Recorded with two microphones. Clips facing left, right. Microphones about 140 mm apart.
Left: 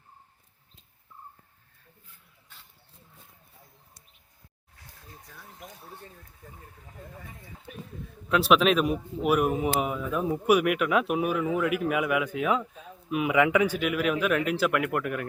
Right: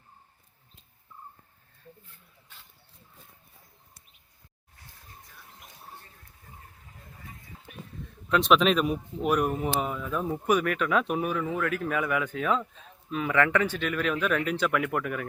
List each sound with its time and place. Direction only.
8.3 s a man's voice: 5° left (ahead or behind)